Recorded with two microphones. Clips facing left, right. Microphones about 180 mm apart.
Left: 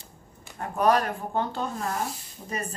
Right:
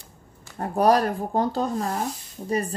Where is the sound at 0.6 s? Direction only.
35° right (ahead or behind).